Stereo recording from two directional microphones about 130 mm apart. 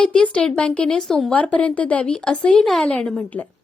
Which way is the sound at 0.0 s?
5° left (ahead or behind).